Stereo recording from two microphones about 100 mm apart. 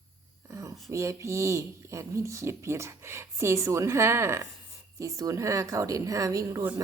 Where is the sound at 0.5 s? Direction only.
30° right (ahead or behind).